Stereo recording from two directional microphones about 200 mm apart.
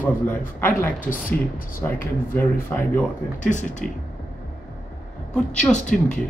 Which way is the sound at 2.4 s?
10° left (ahead or behind).